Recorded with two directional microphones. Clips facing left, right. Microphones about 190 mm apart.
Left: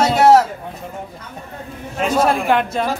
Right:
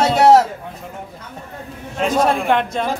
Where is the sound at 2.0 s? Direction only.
5° left (ahead or behind).